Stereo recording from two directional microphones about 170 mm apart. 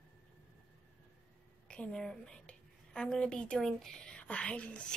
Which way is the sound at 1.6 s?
5° left (ahead or behind).